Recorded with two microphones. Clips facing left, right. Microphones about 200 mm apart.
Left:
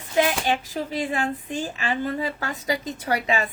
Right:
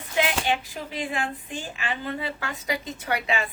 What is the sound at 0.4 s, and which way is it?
Speech, 40° left (ahead or behind).